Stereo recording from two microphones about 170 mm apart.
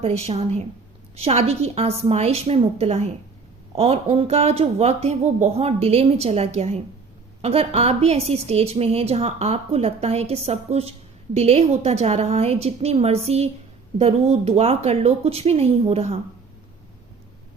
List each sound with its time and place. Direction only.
0.0 s a woman's voice: 40° right (ahead or behind)